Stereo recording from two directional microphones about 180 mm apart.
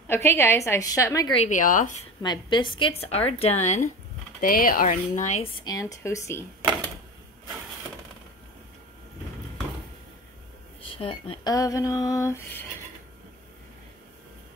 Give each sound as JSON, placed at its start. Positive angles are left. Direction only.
{"t": 0.1, "sound": "a woman's voice", "side_deg": 15}
{"t": 1.3, "sound": "speech", "side_deg": 40}
{"t": 2.2, "sound": "a woman's voice", "side_deg": 25}
{"t": 4.4, "sound": "speech", "side_deg": 50}
{"t": 5.6, "sound": "a woman's voice", "side_deg": 20}
{"t": 10.9, "sound": "a sound", "side_deg": 30}